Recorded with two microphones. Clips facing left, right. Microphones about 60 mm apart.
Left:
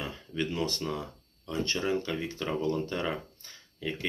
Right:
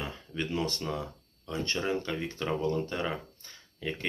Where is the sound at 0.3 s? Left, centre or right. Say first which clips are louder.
Left 1 dB; right.